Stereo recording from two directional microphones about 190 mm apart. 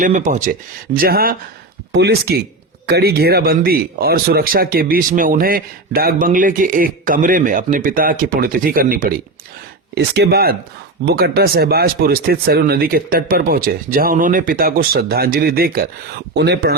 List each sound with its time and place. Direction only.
0.0 s speech: 45° right (ahead or behind)
1.9 s speech: 60° right (ahead or behind)